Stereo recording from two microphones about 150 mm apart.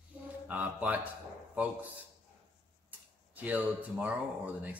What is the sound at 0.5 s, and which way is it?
Speech, 10° right (ahead or behind).